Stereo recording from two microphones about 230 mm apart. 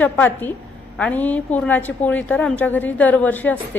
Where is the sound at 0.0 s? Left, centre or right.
Centre.